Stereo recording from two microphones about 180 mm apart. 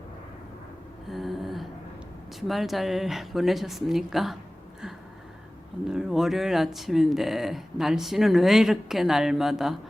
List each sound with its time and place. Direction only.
1.1 s a sound: centre (ahead or behind)
2.5 s speech: centre (ahead or behind)
5.9 s speech: centre (ahead or behind)